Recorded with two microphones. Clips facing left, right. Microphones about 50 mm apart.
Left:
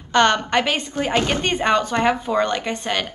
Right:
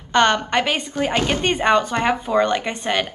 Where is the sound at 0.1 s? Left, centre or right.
Centre.